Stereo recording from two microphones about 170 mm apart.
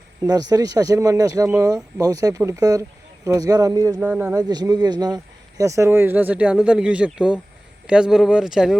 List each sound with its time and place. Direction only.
0.2 s speech: 20° right (ahead or behind)
4.0 s speech: 10° right (ahead or behind)
4.4 s speech: 20° right (ahead or behind); by 8.8 s 5° right (ahead or behind)